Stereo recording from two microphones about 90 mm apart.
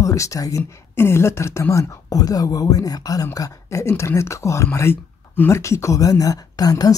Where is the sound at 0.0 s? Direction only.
35° left (ahead or behind).